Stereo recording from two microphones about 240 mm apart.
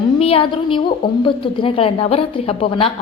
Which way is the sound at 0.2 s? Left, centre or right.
Left.